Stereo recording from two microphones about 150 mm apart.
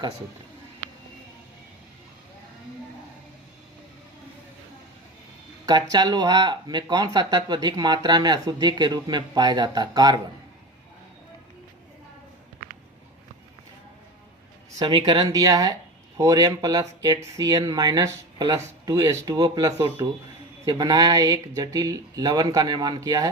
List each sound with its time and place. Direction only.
5.6 s speech: 25° right (ahead or behind)
14.8 s speech: 35° right (ahead or behind)
15.3 s speech: 25° right (ahead or behind)